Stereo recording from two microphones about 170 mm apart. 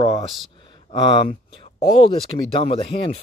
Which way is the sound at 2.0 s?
35° left (ahead or behind).